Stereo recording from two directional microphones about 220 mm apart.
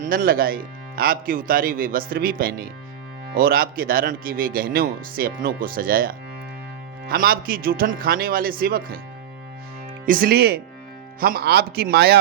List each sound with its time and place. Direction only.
0.0 s speech: 40° right (ahead or behind)
10.1 s a man's voice: 45° right (ahead or behind)